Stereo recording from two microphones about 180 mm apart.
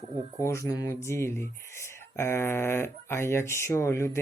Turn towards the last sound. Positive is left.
turn(degrees=15)  # may be behind; listen again after turning